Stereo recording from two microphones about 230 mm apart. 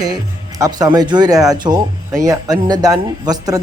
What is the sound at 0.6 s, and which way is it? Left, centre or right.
Speech, centre.